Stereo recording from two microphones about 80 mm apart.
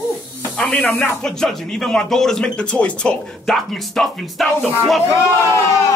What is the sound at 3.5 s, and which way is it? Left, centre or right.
Speech, centre.